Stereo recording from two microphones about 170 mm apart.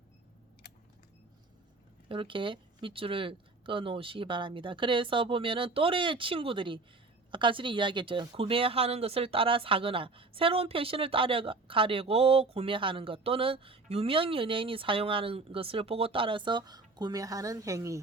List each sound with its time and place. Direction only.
2.0 s speech: 30° right (ahead or behind)